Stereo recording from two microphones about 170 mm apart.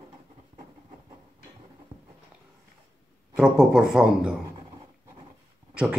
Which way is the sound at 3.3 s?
5° right (ahead or behind).